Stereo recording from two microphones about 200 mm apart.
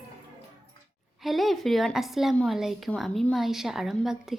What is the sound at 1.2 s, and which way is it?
A woman's voice, centre (ahead or behind).